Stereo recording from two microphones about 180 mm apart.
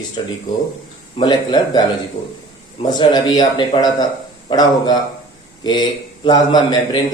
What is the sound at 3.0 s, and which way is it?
A man's voice, 25° left (ahead or behind).